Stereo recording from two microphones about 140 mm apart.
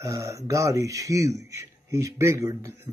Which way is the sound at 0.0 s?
20° right (ahead or behind).